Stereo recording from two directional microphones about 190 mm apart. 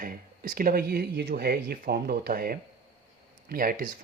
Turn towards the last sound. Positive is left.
turn(degrees=-45)  # may be behind; listen again after turning